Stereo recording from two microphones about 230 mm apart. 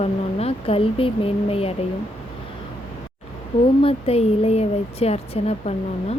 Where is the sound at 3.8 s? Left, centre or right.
Left.